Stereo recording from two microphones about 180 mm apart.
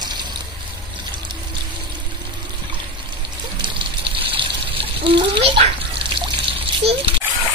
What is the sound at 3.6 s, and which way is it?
Water, 30° right (ahead or behind).